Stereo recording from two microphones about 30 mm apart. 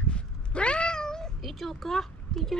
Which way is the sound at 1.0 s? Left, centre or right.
Left.